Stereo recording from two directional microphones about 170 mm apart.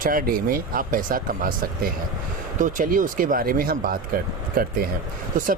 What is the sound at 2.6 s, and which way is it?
Speech, 50° right (ahead or behind).